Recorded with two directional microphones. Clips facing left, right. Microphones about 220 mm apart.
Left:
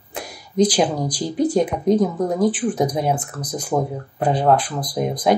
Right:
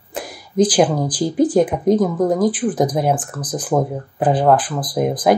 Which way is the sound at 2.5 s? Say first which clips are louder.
Right 2 dB; centre (ahead or behind).